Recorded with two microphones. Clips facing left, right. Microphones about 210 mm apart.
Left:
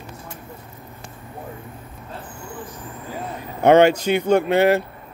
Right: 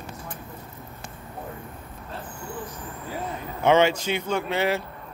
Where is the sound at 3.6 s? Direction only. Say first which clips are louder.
Left 6 dB; 60° left (ahead or behind).